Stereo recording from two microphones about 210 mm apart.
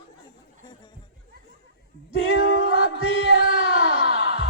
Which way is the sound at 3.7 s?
65° left (ahead or behind).